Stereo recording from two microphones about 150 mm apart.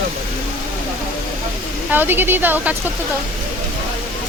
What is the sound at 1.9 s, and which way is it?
Speech, 15° right (ahead or behind).